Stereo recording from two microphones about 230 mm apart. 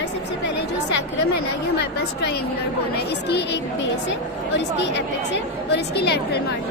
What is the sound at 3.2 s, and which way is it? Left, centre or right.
A woman's voice, left.